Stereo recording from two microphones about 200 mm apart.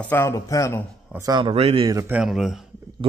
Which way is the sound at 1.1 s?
20° right (ahead or behind).